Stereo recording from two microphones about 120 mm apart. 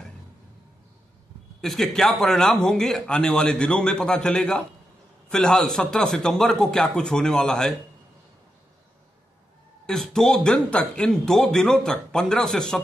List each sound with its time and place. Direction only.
1.6 s speech: 5° left (ahead or behind)
9.8 s speech: 5° left (ahead or behind)